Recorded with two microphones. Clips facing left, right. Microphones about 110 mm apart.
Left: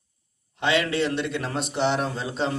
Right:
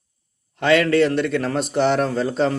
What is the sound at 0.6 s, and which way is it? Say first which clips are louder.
Speech: right 7 dB; 50° right (ahead or behind).